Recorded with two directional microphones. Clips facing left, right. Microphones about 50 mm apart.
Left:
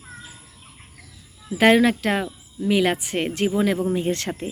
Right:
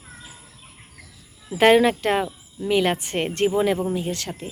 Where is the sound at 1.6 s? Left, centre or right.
Centre.